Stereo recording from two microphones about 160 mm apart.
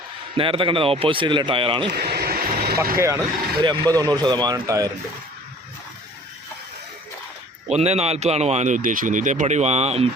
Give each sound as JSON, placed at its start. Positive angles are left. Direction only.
{"t": 0.3, "sound": "a man's voice", "side_deg": -35}
{"t": 1.9, "sound": "vehicle", "side_deg": -85}
{"t": 3.6, "sound": "speech", "side_deg": -25}
{"t": 7.7, "sound": "speech", "side_deg": -40}